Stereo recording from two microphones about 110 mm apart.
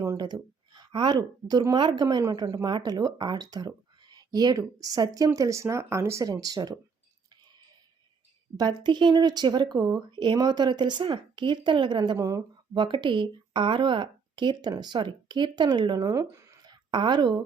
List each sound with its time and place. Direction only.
0.7 s a woman's voice: 45° right (ahead or behind)
8.5 s speech: 40° right (ahead or behind)
12.1 s speech: 30° right (ahead or behind)
12.7 s speech: 45° right (ahead or behind)
16.3 s a sound: 30° right (ahead or behind)
16.9 s speech: 40° right (ahead or behind)